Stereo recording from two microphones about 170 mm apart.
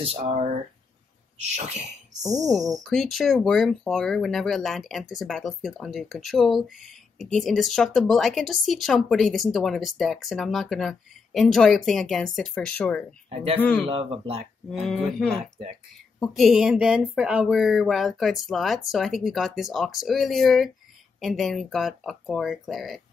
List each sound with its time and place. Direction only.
0.0 s speech: 35° right (ahead or behind)
2.2 s speech: 45° right (ahead or behind)
2.9 s speech: centre (ahead or behind)
13.3 s speech: 35° right (ahead or behind)
13.6 s a man's voice: 10° left (ahead or behind)
13.8 s speech: 35° right (ahead or behind)
14.7 s speech: centre (ahead or behind)